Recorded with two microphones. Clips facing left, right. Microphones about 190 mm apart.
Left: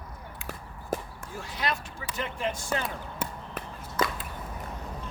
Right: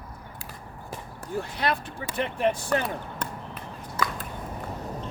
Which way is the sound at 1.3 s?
60° right (ahead or behind).